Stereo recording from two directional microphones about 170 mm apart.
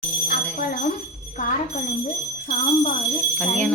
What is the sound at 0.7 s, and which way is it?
Jingle bell, 60° left (ahead or behind).